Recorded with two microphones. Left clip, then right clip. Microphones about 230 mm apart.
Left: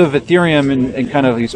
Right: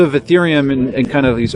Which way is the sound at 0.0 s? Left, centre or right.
Right.